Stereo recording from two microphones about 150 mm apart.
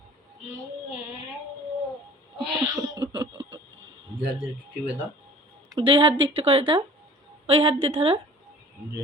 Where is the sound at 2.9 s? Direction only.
30° right (ahead or behind).